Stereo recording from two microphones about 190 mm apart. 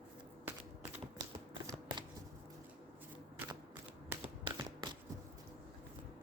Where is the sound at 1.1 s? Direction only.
20° right (ahead or behind).